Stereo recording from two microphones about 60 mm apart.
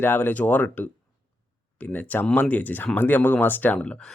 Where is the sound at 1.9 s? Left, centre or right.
Left.